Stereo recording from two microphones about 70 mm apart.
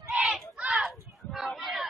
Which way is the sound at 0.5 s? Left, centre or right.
Centre.